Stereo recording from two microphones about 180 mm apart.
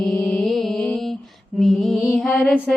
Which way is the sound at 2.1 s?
5° left (ahead or behind).